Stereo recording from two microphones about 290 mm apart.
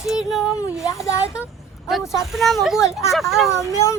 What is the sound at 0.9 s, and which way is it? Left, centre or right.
Speech, centre.